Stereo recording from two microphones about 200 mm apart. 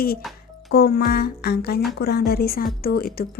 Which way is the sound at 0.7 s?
50° left (ahead or behind).